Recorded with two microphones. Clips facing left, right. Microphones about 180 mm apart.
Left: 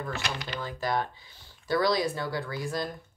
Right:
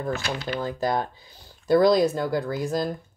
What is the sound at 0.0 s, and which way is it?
Speech, 40° right (ahead or behind).